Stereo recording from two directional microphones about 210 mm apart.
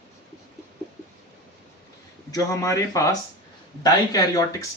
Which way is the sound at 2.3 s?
15° left (ahead or behind).